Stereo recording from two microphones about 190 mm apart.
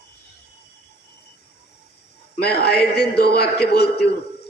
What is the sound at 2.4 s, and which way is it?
A man's voice, 55° left (ahead or behind).